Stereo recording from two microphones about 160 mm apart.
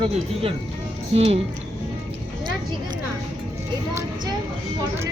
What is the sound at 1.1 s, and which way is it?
Speech, 35° right (ahead or behind).